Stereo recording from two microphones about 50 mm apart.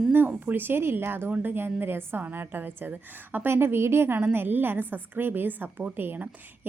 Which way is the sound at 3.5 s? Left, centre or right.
Right.